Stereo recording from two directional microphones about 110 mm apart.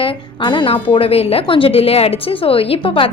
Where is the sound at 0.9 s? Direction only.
60° left (ahead or behind).